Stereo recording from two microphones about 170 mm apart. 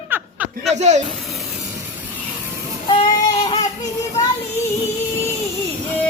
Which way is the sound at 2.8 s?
30° left (ahead or behind).